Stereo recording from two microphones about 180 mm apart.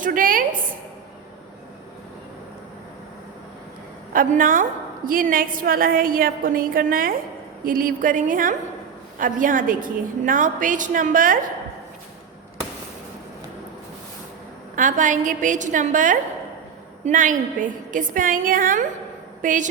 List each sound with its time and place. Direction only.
0.0 s a woman's voice: 50° right (ahead or behind)
4.1 s a woman's voice: 50° right (ahead or behind)
14.8 s a woman's voice: 45° right (ahead or behind)